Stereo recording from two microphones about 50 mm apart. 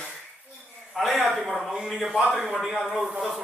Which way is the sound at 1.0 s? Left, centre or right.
Centre.